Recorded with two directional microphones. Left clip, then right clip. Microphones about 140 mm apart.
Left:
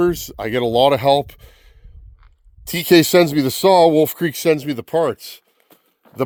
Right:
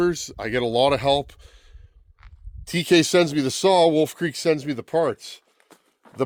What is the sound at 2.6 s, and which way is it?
Speech, 90° left.